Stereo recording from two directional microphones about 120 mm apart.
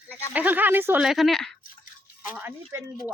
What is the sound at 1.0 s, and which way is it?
Speech, centre (ahead or behind).